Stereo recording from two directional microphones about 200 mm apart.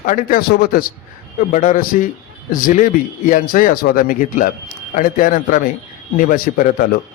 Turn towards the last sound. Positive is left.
turn(degrees=45)  # may be behind; listen again after turning